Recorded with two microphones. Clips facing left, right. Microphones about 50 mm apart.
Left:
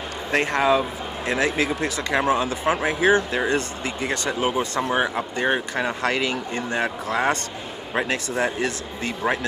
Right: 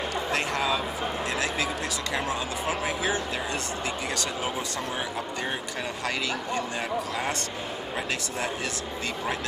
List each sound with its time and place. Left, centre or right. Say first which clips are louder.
0.3 s speech: left 9 dB; left
4.1 s speech: left 6 dB; left
4.5 s speech: left 8 dB; left
6.0 s speech: left 6 dB; left
6.8 s speech: left 6 dB; left
8.1 s speech: left 6 dB; left